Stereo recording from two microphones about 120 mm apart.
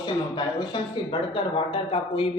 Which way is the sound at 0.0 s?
40° left (ahead or behind).